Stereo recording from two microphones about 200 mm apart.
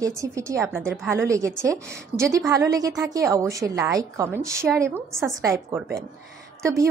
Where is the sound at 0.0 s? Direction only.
15° right (ahead or behind).